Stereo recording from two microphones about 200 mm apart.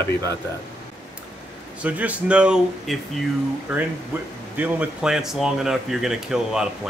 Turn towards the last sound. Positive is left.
turn(degrees=-5)  # may be behind; listen again after turning